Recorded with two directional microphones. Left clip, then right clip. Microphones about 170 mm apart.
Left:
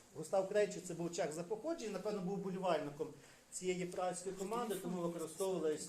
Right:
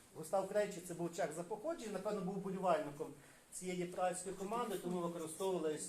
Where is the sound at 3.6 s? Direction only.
50° left (ahead or behind).